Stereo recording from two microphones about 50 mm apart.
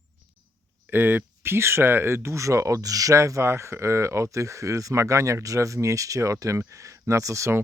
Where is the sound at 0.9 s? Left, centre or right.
Right.